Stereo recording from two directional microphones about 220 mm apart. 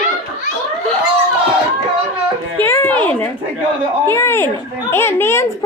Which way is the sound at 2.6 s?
10° left (ahead or behind).